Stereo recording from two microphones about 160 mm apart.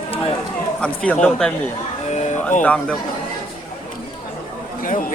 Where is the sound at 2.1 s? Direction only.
45° left (ahead or behind).